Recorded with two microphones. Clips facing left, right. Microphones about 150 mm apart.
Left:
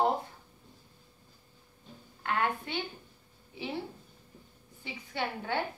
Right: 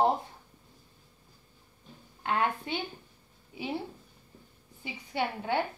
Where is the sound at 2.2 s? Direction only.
20° right (ahead or behind).